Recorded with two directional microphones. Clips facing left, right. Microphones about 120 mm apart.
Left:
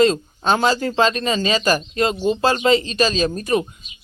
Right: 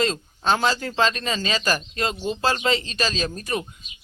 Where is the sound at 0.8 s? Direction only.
30° left (ahead or behind).